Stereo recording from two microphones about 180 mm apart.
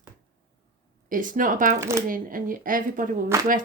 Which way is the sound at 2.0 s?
50° right (ahead or behind).